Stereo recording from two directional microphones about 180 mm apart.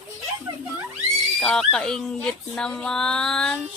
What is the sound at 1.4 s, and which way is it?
Speech, 5° left (ahead or behind).